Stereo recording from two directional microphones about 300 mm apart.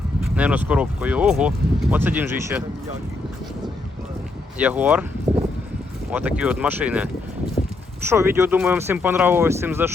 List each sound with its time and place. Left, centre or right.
0.3 s speech: centre
4.5 s speech: centre
6.1 s speech: centre
8.1 s speech: centre